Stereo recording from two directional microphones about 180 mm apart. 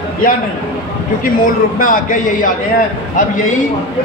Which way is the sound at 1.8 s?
45° left (ahead or behind).